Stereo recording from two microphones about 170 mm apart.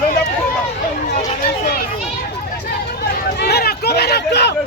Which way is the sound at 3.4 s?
70° left (ahead or behind).